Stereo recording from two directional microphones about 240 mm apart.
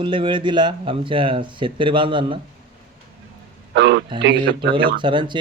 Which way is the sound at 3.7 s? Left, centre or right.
Right.